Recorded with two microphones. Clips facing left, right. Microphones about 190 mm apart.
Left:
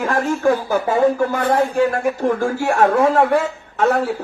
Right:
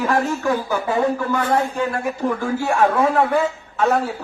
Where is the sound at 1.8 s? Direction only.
90° left.